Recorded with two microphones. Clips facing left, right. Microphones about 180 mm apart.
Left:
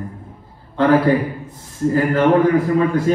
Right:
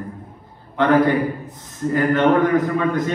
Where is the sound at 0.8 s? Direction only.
30° left (ahead or behind).